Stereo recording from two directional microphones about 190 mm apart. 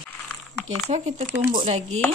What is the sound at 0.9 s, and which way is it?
Speech, 40° right (ahead or behind).